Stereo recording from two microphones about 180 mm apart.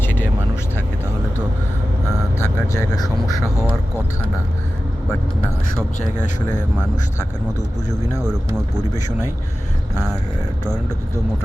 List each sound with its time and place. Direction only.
0.0 s vehicle: 10° left (ahead or behind)
2.4 s speech: 20° left (ahead or behind)